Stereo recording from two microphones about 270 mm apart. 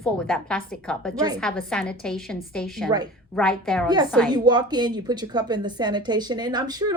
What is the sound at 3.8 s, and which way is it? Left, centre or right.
A woman's voice, centre.